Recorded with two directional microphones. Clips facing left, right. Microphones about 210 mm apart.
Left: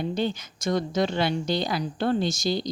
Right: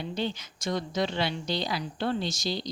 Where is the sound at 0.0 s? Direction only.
50° left (ahead or behind).